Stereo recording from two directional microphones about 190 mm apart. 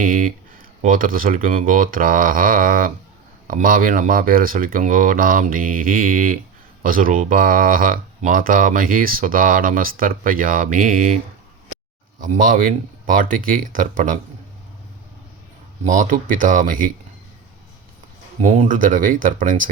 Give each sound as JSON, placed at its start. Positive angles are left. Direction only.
{"t": 0.0, "sound": "a sound", "side_deg": -45}
{"t": 0.8, "sound": "speech", "side_deg": -45}
{"t": 12.2, "sound": "speech", "side_deg": -45}
{"t": 15.8, "sound": "speech", "side_deg": -40}
{"t": 18.3, "sound": "speech", "side_deg": -40}